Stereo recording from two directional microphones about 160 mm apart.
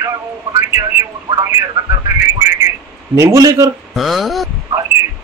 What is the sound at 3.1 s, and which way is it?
Speech, 20° right (ahead or behind).